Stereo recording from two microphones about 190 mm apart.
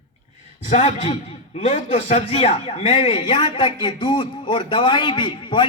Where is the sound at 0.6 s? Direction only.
40° left (ahead or behind).